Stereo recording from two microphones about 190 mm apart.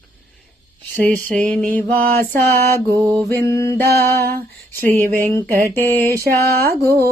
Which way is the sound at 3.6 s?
15° left (ahead or behind).